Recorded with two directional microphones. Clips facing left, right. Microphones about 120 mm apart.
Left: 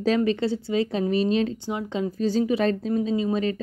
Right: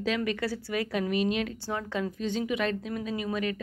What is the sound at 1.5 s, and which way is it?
Speech, 15° left (ahead or behind).